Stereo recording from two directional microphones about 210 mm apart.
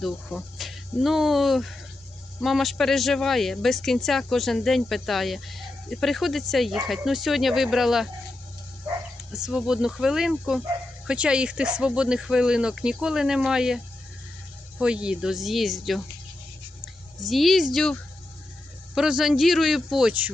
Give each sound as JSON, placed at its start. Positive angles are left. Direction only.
{"t": 0.0, "sound": "speech", "side_deg": 0}
{"t": 9.3, "sound": "speech", "side_deg": 0}